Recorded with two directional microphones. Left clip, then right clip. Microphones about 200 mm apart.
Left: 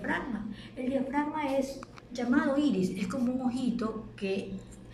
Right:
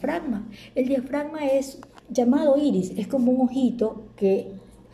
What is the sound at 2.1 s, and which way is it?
Speech, 50° right (ahead or behind).